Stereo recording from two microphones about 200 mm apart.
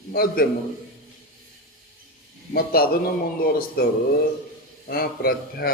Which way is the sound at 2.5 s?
50° left (ahead or behind).